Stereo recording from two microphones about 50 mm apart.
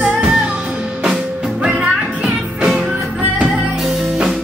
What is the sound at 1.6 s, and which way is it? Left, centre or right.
Music, centre.